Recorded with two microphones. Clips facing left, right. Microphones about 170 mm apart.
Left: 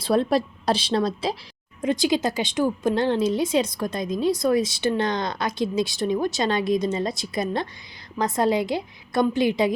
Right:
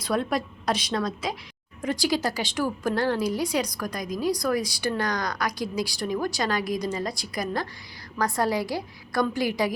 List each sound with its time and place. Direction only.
0.0 s a woman's voice: 30° left (ahead or behind)
1.8 s a woman's voice: 20° left (ahead or behind)